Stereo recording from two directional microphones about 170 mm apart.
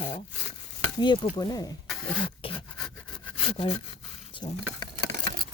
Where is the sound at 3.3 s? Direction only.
35° left (ahead or behind).